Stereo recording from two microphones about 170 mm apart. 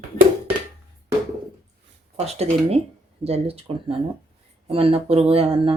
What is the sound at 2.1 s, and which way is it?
Speech, 35° right (ahead or behind).